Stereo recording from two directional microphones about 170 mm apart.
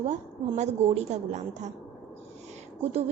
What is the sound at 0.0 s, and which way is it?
A woman's voice, 45° right (ahead or behind).